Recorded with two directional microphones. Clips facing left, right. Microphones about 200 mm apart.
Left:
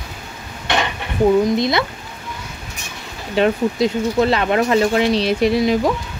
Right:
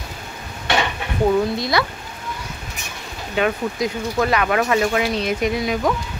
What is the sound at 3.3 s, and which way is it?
Speech, 30° left (ahead or behind).